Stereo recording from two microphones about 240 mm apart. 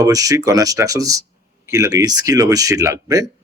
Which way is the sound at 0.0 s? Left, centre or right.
Centre.